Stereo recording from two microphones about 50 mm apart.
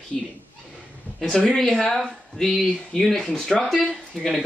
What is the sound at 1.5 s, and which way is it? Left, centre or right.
Speech, centre.